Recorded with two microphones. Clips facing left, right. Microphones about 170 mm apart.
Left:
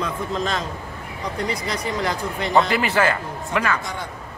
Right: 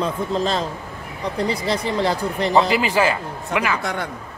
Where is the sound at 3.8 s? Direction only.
65° right (ahead or behind).